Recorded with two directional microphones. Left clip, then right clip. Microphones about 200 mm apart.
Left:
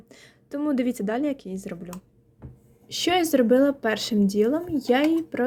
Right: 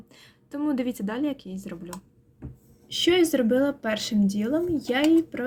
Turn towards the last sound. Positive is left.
turn(degrees=30)  # may be behind; listen again after turning